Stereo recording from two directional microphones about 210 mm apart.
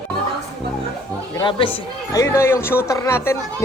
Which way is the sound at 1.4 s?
25° left (ahead or behind).